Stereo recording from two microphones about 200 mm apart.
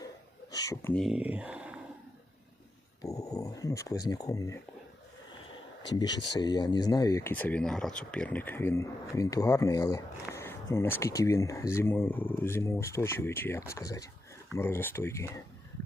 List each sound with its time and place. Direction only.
0.5 s speech: 15° left (ahead or behind)
1.0 s speech: 5° right (ahead or behind)
3.0 s dog: 15° left (ahead or behind)
5.9 s speech: 20° left (ahead or behind)